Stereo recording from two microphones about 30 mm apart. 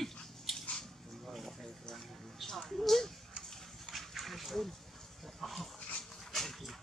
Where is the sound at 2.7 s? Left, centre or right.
Centre.